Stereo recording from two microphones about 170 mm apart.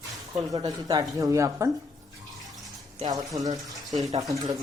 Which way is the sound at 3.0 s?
20° right (ahead or behind).